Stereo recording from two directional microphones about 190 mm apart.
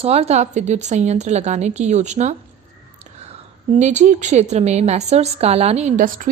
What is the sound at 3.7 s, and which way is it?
A woman's voice, 40° right (ahead or behind).